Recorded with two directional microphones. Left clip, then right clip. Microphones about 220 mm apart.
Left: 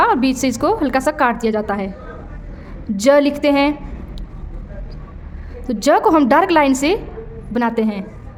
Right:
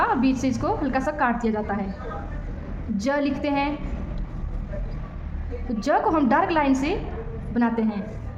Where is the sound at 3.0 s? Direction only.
55° left (ahead or behind).